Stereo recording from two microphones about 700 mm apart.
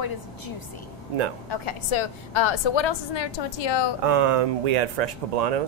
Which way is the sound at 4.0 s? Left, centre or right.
Right.